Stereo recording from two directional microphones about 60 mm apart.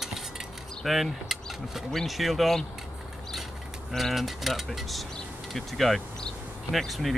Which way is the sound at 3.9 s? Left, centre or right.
Centre.